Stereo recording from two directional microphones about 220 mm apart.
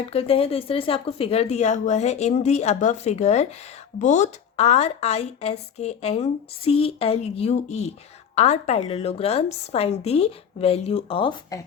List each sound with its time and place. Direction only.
0.1 s a woman's voice: 25° left (ahead or behind)